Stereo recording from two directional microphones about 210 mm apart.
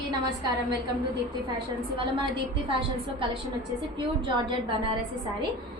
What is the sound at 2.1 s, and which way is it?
A woman's voice, 25° right (ahead or behind).